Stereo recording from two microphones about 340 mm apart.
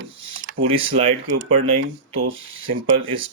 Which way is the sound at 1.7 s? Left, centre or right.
Right.